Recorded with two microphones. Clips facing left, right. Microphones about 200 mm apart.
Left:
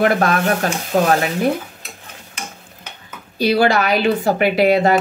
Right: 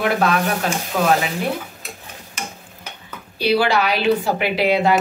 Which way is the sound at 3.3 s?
45° left (ahead or behind).